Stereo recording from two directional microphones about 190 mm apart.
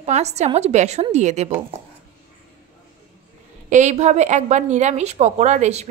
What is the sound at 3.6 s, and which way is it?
A woman's voice, 40° right (ahead or behind).